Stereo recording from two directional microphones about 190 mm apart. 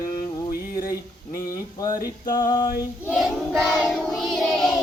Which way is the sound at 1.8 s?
20° left (ahead or behind).